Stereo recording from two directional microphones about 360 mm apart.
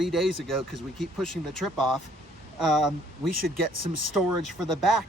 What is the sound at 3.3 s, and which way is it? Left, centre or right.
Speech, right.